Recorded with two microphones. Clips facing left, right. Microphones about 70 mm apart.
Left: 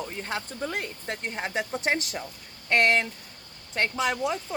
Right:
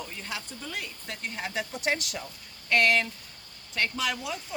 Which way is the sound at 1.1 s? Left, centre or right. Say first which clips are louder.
Left 3 dB; left.